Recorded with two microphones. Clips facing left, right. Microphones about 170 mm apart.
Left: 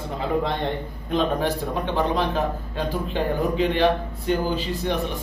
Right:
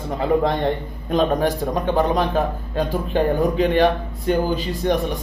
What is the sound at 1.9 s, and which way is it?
A man's voice, 50° right (ahead or behind).